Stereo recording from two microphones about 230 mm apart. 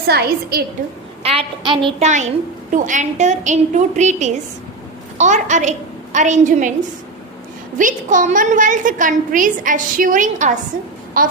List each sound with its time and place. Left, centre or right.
0.1 s a woman's voice: right
1.2 s a woman's voice: right
7.8 s a woman's voice: right